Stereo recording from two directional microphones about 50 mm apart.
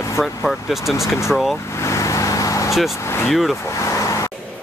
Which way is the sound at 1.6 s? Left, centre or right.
Left.